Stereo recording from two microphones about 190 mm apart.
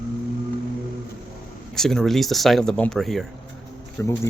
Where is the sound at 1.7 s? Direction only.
Centre (ahead or behind).